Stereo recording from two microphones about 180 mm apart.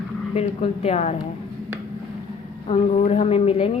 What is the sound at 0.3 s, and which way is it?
Speech, 35° left (ahead or behind).